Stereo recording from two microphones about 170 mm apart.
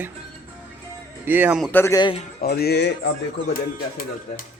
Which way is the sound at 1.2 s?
10° right (ahead or behind).